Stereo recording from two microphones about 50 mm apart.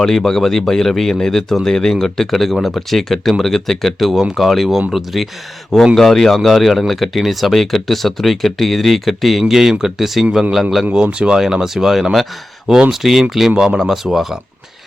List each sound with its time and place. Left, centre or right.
0.0 s speech: centre
10.9 s speech: centre